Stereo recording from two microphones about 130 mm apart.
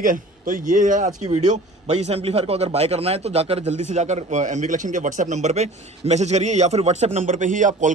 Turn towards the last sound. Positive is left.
turn(degrees=-75)  # may be behind; listen again after turning